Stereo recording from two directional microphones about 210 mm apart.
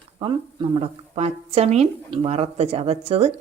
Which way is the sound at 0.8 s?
30° right (ahead or behind).